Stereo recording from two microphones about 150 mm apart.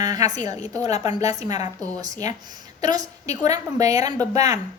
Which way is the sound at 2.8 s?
25° right (ahead or behind).